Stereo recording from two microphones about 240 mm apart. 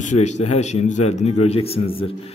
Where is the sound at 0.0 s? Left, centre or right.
Left.